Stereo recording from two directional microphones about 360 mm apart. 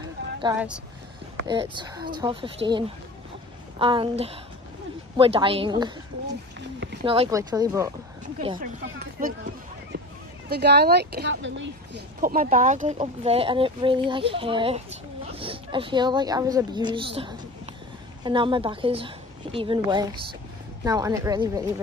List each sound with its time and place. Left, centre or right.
0.4 s speech: centre
3.8 s speech: centre
7.1 s speech: centre
8.8 s speech: right
10.5 s a woman's voice: right; by 21.8 s centre